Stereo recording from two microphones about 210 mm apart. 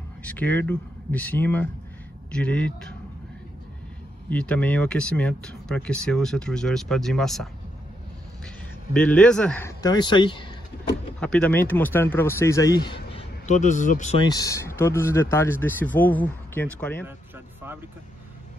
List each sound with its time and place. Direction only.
0.2 s speech: 5° left (ahead or behind)
4.3 s speech: 5° left (ahead or behind)
8.9 s speech: 5° left (ahead or behind); by 10.5 s 25° left (ahead or behind)
11.1 s speech: 5° left (ahead or behind); by 14.2 s 35° left (ahead or behind)
14.2 s speech: 15° left (ahead or behind)